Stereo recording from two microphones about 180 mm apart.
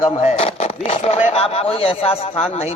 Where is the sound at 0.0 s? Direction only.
40° left (ahead or behind).